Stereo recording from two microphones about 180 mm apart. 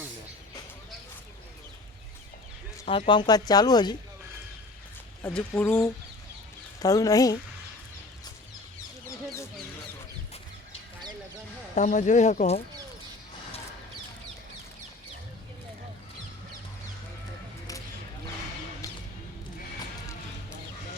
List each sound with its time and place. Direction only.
3.1 s speech: 25° left (ahead or behind)
5.2 s speech: 5° left (ahead or behind)
6.7 s speech: 20° left (ahead or behind)
9.0 s a sound: 15° left (ahead or behind)
11.7 s speech: 45° left (ahead or behind)